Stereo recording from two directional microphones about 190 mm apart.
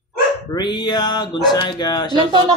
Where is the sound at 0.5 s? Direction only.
25° left (ahead or behind).